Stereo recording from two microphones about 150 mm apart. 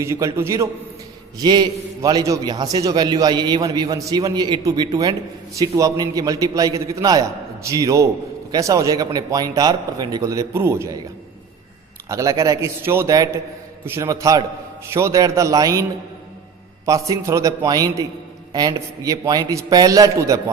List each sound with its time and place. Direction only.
0.0 s a man's voice: 20° right (ahead or behind)
12.0 s a man's voice: 20° right (ahead or behind)
16.8 s a man's voice: 20° right (ahead or behind)
19.0 s a man's voice: 20° right (ahead or behind)